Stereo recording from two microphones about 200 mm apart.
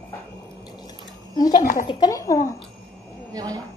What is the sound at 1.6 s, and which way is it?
Speech, 40° left (ahead or behind).